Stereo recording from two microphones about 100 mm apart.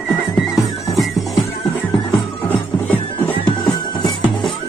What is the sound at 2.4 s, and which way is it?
Music, 15° left (ahead or behind).